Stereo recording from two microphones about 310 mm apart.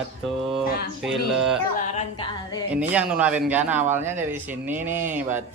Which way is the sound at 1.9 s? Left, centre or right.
Centre.